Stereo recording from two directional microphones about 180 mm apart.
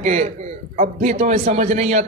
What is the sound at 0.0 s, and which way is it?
A man's voice, 40° right (ahead or behind).